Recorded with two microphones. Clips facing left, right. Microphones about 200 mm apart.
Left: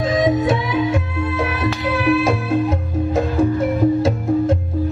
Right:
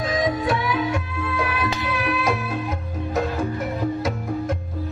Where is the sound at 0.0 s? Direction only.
25° left (ahead or behind).